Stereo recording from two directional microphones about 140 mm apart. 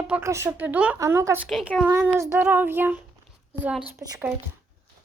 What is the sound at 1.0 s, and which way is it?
Speech, 20° right (ahead or behind).